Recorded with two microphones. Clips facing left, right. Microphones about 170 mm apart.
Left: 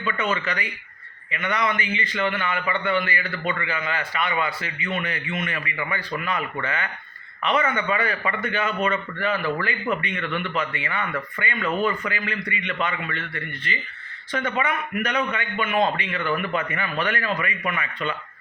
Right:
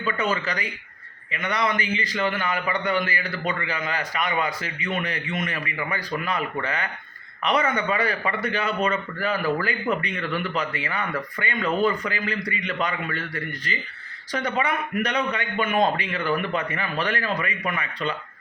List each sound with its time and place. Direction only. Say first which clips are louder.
0.2 s a man's voice: even; 35° right (ahead or behind)